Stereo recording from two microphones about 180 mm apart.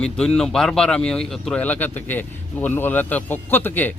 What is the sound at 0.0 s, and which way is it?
Speech, 5° left (ahead or behind).